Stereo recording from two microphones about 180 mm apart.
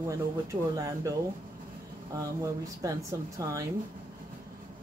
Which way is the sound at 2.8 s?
15° right (ahead or behind).